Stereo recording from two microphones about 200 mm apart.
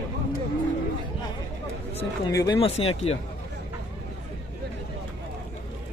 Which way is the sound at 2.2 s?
20° left (ahead or behind).